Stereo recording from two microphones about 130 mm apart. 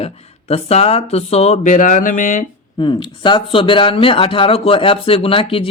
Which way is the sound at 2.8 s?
40° left (ahead or behind).